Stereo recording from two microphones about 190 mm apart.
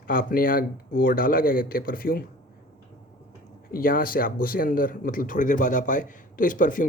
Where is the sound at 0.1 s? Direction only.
50° left (ahead or behind).